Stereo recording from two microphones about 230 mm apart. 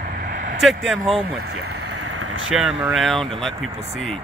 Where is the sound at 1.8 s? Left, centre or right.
Right.